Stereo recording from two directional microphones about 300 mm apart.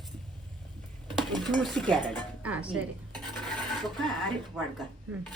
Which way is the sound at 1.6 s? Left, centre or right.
Centre.